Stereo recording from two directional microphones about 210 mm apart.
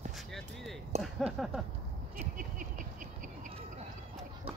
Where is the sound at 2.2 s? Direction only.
40° right (ahead or behind).